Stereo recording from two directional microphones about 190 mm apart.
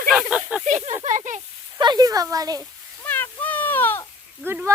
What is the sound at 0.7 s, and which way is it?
Snake, 35° right (ahead or behind).